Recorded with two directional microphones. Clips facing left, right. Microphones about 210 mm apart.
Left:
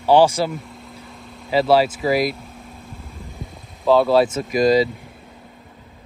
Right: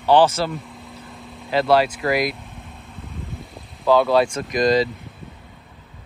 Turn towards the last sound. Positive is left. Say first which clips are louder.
# left 2 dB
turn(degrees=5)  # may be behind; listen again after turning